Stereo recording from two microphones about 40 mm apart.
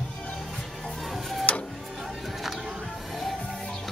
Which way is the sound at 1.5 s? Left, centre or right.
Left.